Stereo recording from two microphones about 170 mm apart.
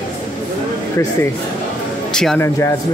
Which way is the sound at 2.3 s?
15° left (ahead or behind).